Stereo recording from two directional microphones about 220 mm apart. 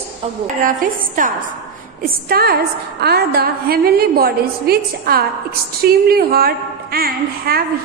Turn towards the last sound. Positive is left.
turn(degrees=-45)  # may be behind; listen again after turning